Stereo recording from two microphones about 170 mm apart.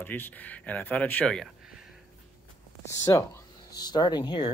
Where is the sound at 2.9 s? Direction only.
15° left (ahead or behind).